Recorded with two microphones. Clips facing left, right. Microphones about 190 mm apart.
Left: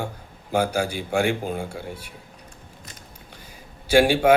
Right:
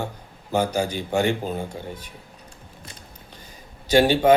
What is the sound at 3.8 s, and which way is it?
Speech, 10° left (ahead or behind).